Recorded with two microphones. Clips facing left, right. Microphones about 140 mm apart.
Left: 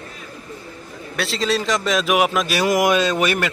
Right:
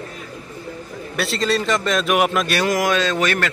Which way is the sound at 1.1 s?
Centre (ahead or behind).